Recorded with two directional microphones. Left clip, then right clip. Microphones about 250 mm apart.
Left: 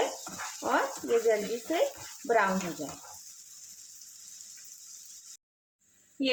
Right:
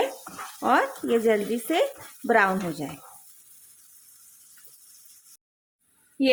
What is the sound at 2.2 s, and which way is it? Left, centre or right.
Speech, right.